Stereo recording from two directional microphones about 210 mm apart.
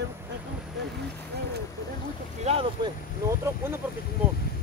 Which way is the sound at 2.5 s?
25° right (ahead or behind).